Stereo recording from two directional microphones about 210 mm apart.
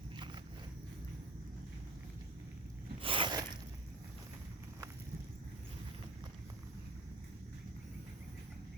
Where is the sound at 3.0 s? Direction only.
25° right (ahead or behind).